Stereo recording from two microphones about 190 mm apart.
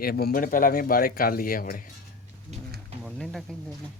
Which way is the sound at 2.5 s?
35° right (ahead or behind).